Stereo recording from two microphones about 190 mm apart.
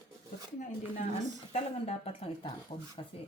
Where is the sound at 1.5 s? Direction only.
35° left (ahead or behind).